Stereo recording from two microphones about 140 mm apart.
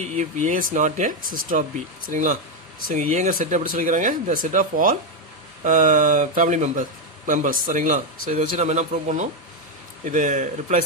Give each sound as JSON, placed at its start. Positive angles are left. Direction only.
{"t": 0.2, "sound": "speech", "side_deg": -65}